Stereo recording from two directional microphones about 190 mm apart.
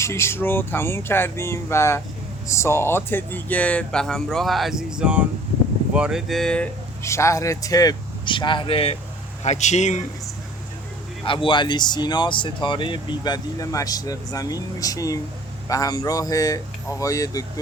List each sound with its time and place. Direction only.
0.0 s speech: 15° left (ahead or behind)
7.0 s speech: 15° left (ahead or behind); by 10.0 s 40° left (ahead or behind)
11.3 s speech: 25° left (ahead or behind)